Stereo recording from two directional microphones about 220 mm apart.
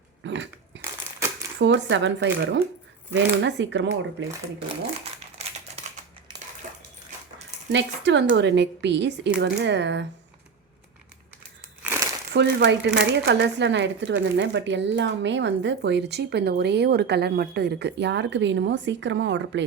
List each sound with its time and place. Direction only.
0.3 s biting: 55° right (ahead or behind)
1.5 s speech: 55° right (ahead or behind)
7.7 s speech: 55° right (ahead or behind)
11.8 s crumpling: 10° right (ahead or behind)
12.3 s speech: 50° right (ahead or behind)